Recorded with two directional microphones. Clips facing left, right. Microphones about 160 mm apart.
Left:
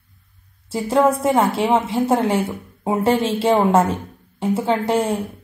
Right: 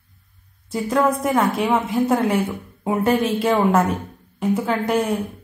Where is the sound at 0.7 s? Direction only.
25° left (ahead or behind).